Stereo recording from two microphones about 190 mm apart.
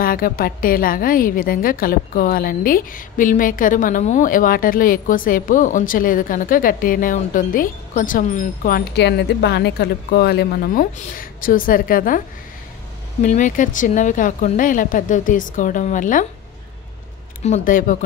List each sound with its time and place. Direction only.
0.0 s a woman's voice: 50° left (ahead or behind)
13.2 s a woman's voice: 40° left (ahead or behind)
17.4 s a woman's voice: 40° left (ahead or behind)